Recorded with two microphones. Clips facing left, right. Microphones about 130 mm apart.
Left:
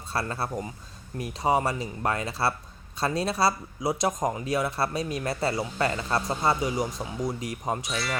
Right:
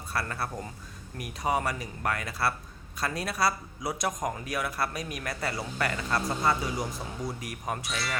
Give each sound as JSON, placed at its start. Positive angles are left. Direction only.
{"t": 0.1, "sound": "speech", "side_deg": 25}
{"t": 7.9, "sound": "speech", "side_deg": 0}